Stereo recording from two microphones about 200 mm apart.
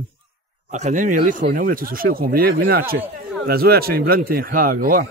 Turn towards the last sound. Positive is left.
turn(degrees=-45)  # may be behind; listen again after turning